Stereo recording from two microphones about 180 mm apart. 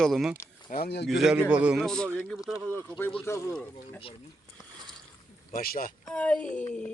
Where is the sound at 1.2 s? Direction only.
5° right (ahead or behind).